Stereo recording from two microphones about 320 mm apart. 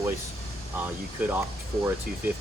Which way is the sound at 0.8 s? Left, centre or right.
Centre.